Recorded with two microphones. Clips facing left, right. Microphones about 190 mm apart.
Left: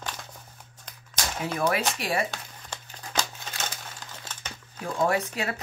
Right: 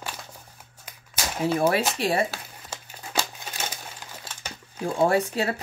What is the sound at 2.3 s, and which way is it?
Crumpling, 5° right (ahead or behind).